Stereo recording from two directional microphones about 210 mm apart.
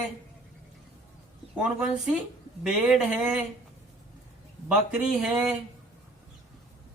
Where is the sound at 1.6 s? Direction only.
5° right (ahead or behind).